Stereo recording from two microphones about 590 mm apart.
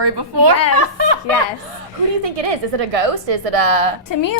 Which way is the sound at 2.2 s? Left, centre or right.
Right.